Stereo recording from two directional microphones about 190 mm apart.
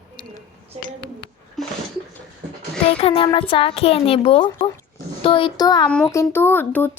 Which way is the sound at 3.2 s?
30° left (ahead or behind).